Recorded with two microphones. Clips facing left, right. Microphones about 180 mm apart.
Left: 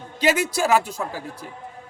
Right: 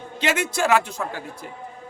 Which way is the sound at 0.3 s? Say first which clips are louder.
Left 1 dB; 35° left (ahead or behind).